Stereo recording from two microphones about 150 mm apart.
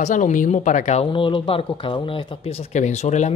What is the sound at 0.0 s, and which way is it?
Speech, 55° left (ahead or behind).